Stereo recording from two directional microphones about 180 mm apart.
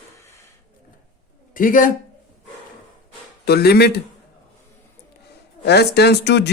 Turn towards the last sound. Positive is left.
turn(degrees=70)  # may be behind; listen again after turning